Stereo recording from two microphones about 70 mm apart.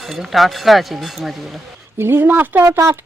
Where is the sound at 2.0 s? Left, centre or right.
Right.